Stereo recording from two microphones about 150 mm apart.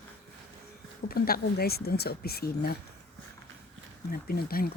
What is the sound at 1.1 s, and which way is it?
Speech, 90° left.